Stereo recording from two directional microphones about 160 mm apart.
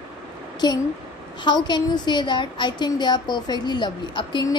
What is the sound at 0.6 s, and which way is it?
A woman's voice, 25° left (ahead or behind).